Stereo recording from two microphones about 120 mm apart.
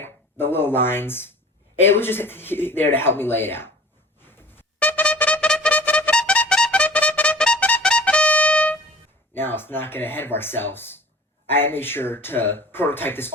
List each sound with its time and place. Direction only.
0.0 s speech: 20° left (ahead or behind)
4.5 s music: 15° left (ahead or behind)
9.3 s speech: 15° left (ahead or behind)